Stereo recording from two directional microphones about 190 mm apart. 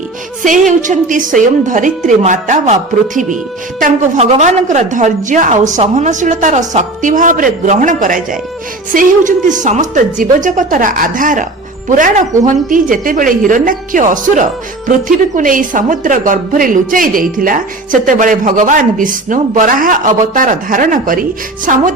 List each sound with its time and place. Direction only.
0.4 s a woman's voice: 40° right (ahead or behind)
3.8 s a woman's voice: 45° right (ahead or behind)